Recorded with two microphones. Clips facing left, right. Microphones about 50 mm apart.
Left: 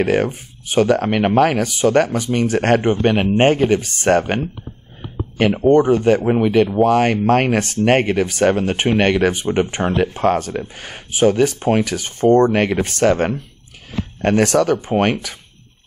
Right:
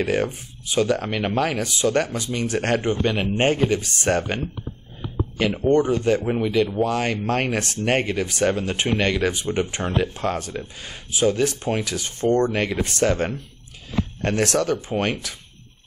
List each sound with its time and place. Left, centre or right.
0.0 s speech: left
6.4 s speech: left